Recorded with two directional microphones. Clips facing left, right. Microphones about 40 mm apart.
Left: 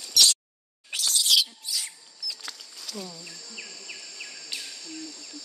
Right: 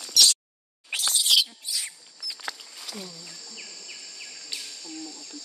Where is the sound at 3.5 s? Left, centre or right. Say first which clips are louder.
Left 4 dB; centre.